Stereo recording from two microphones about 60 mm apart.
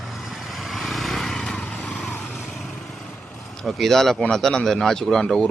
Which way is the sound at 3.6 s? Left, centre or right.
Centre.